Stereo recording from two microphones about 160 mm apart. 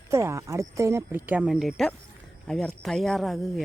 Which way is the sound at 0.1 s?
20° right (ahead or behind).